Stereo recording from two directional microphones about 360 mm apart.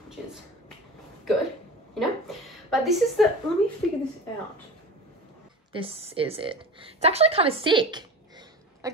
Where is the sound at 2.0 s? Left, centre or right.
Centre.